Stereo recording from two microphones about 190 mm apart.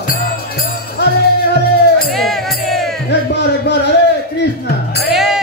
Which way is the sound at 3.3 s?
65° left (ahead or behind).